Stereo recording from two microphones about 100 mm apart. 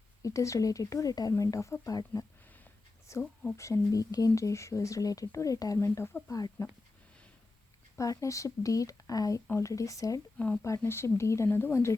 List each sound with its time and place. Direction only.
0.2 s speech: 30° left (ahead or behind)
7.9 s speech: 35° left (ahead or behind)
10.3 s speech: 15° left (ahead or behind)
10.6 s speech: 25° left (ahead or behind)